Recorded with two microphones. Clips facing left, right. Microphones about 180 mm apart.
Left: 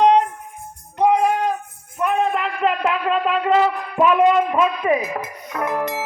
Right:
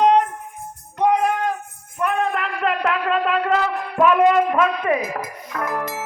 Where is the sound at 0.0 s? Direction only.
Centre (ahead or behind).